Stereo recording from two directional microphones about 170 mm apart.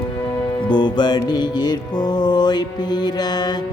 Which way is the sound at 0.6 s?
25° left (ahead or behind).